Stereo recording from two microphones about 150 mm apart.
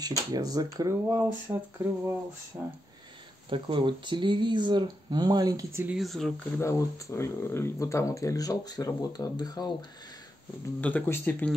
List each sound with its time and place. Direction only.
0.3 s speech: 25° right (ahead or behind)
3.4 s speech: 35° right (ahead or behind); by 5.9 s 15° right (ahead or behind)
5.9 s speech: centre (ahead or behind)
6.6 s speech: 20° left (ahead or behind)
10.8 s speech: 10° left (ahead or behind)